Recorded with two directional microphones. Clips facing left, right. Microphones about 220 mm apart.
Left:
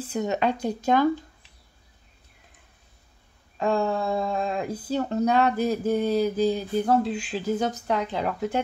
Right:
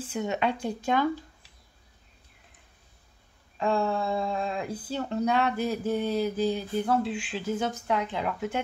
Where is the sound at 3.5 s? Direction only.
40° left (ahead or behind).